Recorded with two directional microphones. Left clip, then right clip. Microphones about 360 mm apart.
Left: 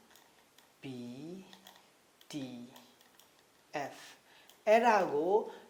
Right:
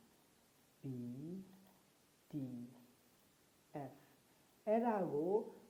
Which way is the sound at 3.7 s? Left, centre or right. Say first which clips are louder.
Left 11 dB; centre.